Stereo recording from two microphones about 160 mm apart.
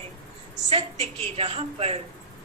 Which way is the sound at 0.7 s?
40° right (ahead or behind).